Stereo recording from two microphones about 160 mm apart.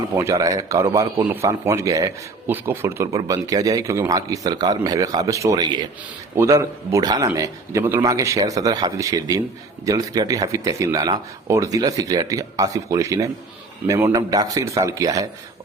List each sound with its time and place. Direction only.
0.2 s a man's voice: 20° right (ahead or behind)